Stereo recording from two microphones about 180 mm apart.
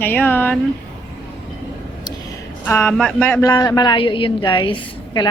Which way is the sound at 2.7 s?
10° left (ahead or behind).